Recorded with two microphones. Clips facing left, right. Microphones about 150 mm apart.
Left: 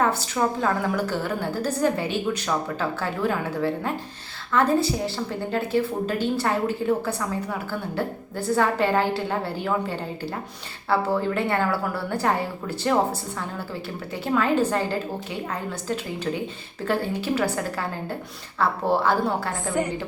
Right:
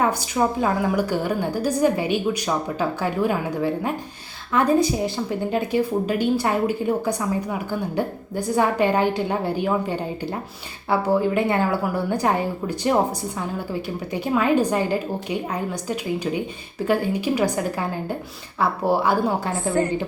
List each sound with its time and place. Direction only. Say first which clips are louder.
0.0 s a woman's voice: right 2 dB; 15° right (ahead or behind)